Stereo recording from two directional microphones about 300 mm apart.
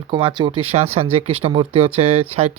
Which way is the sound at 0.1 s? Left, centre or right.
Centre.